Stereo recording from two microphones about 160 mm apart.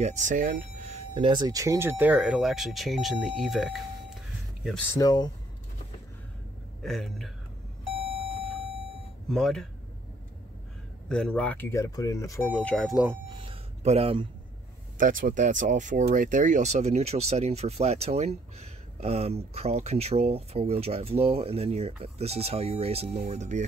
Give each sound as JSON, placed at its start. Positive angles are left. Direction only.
{"t": 0.0, "sound": "speech", "side_deg": -50}
{"t": 1.1, "sound": "speech", "side_deg": -30}
{"t": 4.9, "sound": "speech", "side_deg": 25}
{"t": 6.8, "sound": "speech", "side_deg": 0}
{"t": 9.3, "sound": "speech", "side_deg": 0}
{"t": 11.1, "sound": "speech", "side_deg": 5}
{"t": 13.3, "sound": "a sound", "side_deg": -35}
{"t": 15.0, "sound": "speech", "side_deg": -55}